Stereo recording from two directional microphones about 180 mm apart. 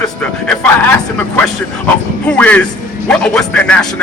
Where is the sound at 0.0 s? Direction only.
5° left (ahead or behind).